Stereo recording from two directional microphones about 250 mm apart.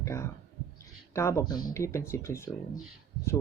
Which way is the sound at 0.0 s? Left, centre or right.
Centre.